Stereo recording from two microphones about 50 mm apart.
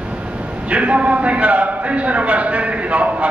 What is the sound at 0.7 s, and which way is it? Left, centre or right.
A man's voice, right.